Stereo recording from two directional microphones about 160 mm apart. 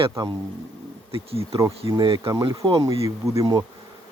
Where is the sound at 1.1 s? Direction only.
35° right (ahead or behind); by 3.6 s 20° right (ahead or behind).